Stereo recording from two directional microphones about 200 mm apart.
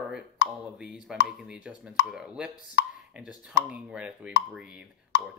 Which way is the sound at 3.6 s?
5° right (ahead or behind).